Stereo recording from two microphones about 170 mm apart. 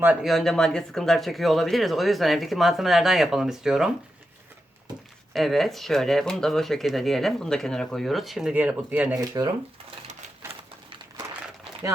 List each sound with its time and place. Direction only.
0.0 s speech: 5° right (ahead or behind)
5.3 s speech: centre (ahead or behind)
9.1 s speech: 20° right (ahead or behind)
10.1 s typewriter: 35° right (ahead or behind)